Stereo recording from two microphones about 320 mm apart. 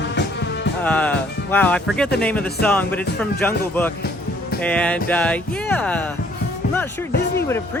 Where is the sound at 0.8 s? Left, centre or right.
Centre.